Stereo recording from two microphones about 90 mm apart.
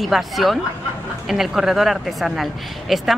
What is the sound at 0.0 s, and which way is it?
Speech, centre (ahead or behind).